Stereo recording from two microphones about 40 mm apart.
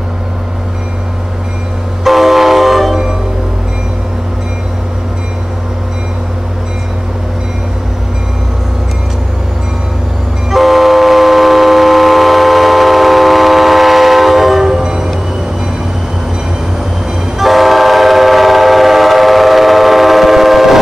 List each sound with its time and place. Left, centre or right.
2.0 s train: centre
10.5 s vehicle: centre
14.8 s train: centre
17.4 s train: centre